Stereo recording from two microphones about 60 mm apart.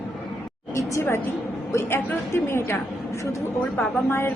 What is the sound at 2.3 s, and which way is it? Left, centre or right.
Speech, left.